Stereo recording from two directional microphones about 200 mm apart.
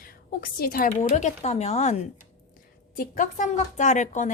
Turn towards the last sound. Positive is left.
turn(degrees=40)  # may be behind; listen again after turning